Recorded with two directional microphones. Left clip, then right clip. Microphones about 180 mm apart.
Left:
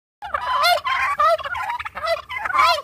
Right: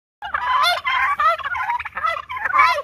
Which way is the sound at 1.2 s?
45° left (ahead or behind).